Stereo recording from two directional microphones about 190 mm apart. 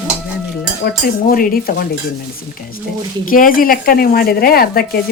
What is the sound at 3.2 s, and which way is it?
Speech, 45° left (ahead or behind).